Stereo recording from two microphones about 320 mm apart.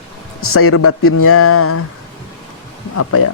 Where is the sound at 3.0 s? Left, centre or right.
Left.